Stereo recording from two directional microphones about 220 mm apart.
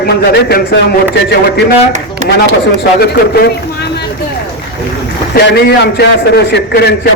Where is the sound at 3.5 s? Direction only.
50° left (ahead or behind).